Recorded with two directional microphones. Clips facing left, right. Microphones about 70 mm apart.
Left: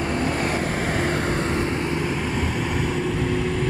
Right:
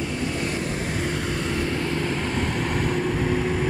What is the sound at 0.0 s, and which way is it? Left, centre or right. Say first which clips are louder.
Vehicle: left 4 dB; left.